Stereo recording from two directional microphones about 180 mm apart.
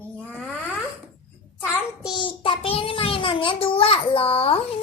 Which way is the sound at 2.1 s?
30° left (ahead or behind).